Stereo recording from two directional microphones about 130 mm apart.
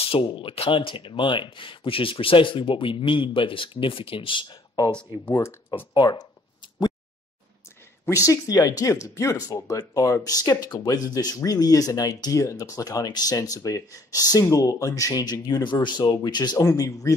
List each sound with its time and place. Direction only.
0.0 s speech: 45° left (ahead or behind)
5.3 s speech: 20° left (ahead or behind)
5.9 s a sound: 35° left (ahead or behind)
8.3 s speech: 30° left (ahead or behind)